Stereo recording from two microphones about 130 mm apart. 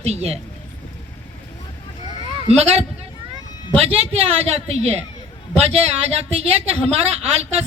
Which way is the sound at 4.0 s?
50° right (ahead or behind).